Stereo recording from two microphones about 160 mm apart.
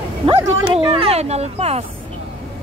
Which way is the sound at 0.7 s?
35° right (ahead or behind).